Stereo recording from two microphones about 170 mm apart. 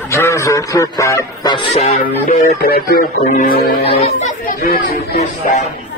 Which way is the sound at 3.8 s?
35° left (ahead or behind).